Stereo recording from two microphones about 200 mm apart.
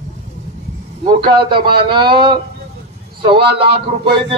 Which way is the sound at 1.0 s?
25° right (ahead or behind).